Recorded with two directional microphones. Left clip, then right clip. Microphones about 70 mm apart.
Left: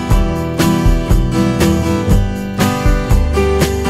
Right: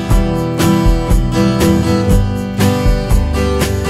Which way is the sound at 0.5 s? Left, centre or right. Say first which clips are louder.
Even; centre.